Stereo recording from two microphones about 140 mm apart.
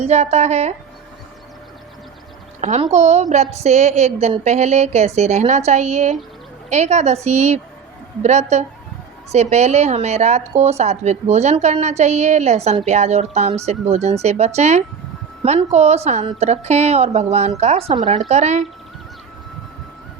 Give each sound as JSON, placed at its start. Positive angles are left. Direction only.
{"t": 0.0, "sound": "a woman's voice", "side_deg": -50}
{"t": 2.6, "sound": "a woman's voice", "side_deg": -55}